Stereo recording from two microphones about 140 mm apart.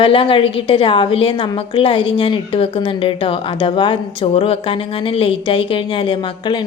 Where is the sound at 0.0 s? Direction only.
40° left (ahead or behind).